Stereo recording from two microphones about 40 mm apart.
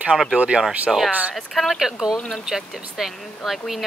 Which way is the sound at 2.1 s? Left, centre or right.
Centre.